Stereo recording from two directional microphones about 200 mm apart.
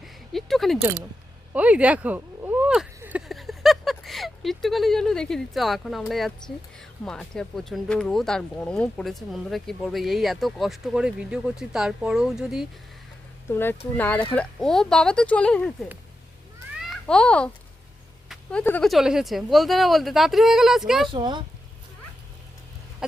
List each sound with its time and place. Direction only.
0.0 s a sound: centre (ahead or behind)
1.5 s speech: 5° right (ahead or behind)
13.5 s speech: 10° left (ahead or behind)
16.9 s a child's voice: 5° left (ahead or behind)
21.1 s speech: 25° right (ahead or behind)